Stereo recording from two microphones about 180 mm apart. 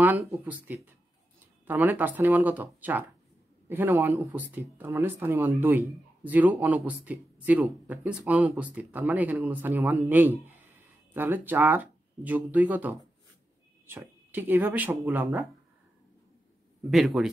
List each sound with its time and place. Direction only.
0.0 s speech: 10° right (ahead or behind)
16.9 s speech: centre (ahead or behind)